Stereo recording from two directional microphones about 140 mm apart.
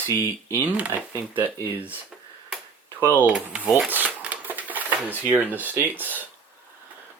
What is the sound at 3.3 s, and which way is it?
Speech, 5° right (ahead or behind).